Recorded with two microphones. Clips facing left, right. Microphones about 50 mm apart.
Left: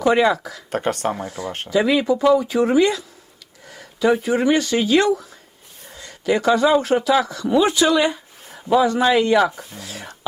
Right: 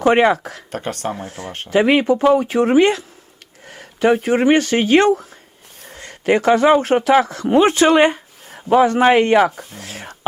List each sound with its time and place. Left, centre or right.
0.0 s speech: right
0.7 s speech: left
1.3 s speech: right